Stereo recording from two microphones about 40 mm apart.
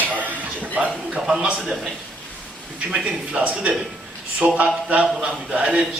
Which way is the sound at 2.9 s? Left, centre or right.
Right.